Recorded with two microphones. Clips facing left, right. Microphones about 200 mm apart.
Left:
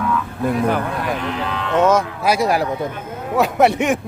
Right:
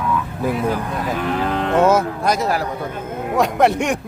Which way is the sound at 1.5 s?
50° right (ahead or behind).